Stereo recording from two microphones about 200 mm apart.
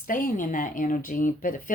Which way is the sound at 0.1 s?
40° left (ahead or behind).